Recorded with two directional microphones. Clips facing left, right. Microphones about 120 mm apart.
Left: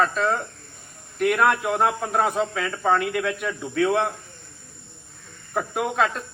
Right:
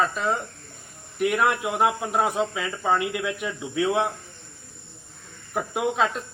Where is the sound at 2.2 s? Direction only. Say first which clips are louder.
Left 1 dB; 15° right (ahead or behind).